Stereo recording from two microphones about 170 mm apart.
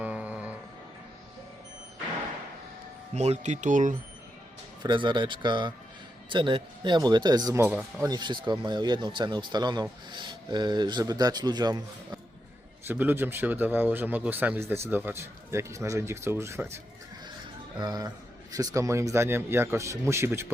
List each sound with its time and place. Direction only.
0.0 s music: 5° right (ahead or behind)
3.2 s speech: 40° right (ahead or behind)
4.8 s speech: 25° right (ahead or behind)
8.0 s speech: 25° right (ahead or behind)
12.9 s speech: 10° right (ahead or behind)